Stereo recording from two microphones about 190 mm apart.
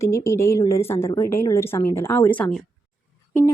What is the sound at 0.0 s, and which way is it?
Speech, 15° left (ahead or behind).